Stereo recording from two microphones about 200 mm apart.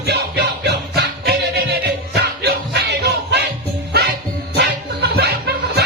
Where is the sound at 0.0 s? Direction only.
55° right (ahead or behind).